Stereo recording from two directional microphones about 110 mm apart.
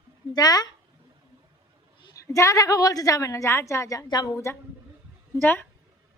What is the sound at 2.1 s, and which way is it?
A woman's voice, 30° left (ahead or behind).